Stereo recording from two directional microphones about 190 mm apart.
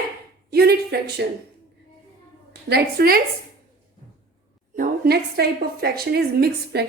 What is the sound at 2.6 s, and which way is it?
Speech, 55° right (ahead or behind).